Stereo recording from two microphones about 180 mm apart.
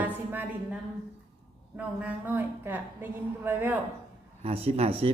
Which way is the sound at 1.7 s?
10° right (ahead or behind).